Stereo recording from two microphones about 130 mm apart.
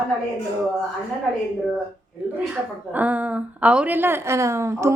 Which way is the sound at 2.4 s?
10° right (ahead or behind).